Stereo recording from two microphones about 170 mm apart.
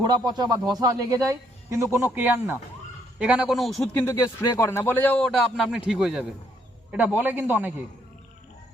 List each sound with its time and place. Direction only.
0.3 s a man's voice: 25° right (ahead or behind); by 3.8 s centre (ahead or behind)
3.9 s a man's voice: 15° left (ahead or behind); by 7.7 s 10° right (ahead or behind)